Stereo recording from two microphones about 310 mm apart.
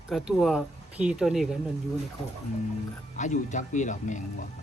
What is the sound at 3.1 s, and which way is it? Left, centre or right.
Speech, left.